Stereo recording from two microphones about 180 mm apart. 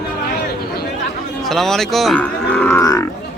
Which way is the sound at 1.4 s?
Centre (ahead or behind).